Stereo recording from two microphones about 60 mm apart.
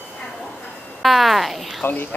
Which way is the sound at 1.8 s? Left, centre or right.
Left.